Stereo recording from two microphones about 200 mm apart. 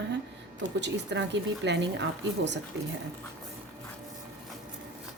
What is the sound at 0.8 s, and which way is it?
Speech, 60° right (ahead or behind).